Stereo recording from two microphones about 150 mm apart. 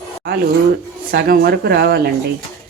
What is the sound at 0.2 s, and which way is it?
Speech, 85° right.